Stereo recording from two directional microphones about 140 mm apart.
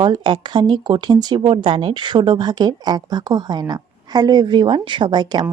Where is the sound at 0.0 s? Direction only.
35° right (ahead or behind).